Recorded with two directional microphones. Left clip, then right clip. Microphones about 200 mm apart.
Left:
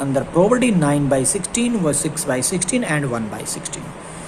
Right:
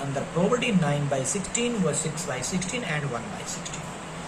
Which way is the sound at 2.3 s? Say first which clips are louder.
Left 12 dB; 55° left (ahead or behind).